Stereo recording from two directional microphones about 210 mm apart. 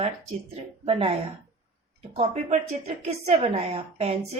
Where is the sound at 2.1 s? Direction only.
30° right (ahead or behind).